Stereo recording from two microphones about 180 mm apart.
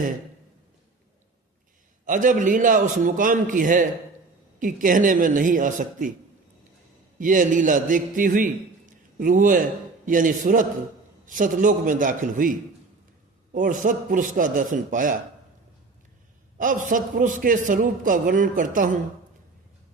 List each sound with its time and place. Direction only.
2.0 s a man's voice: 45° right (ahead or behind)
7.2 s a man's voice: 45° right (ahead or behind)
8.9 s a sound: 45° right (ahead or behind)
10.1 s a man's voice: 45° right (ahead or behind)
16.6 s a man's voice: 50° right (ahead or behind)